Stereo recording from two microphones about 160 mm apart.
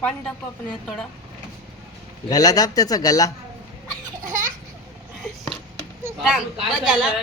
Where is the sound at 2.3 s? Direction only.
25° left (ahead or behind).